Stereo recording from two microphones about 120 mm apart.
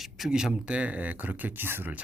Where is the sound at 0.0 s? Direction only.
5° right (ahead or behind).